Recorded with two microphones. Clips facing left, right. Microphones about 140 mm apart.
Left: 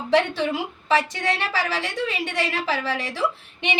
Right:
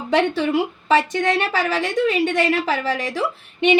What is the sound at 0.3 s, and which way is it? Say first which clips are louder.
A woman's voice: right 5 dB; 50° right (ahead or behind).